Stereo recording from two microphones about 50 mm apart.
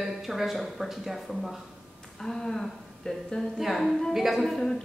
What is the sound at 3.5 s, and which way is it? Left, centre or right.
Speech, centre.